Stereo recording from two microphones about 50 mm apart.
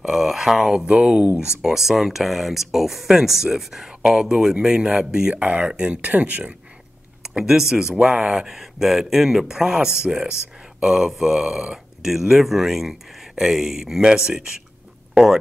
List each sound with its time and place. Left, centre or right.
0.0 s a sound: centre
0.7 s speech: right
1.3 s speech: left
1.6 s speech: centre
5.3 s speech: right
7.2 s speech: centre
10.9 s speech: centre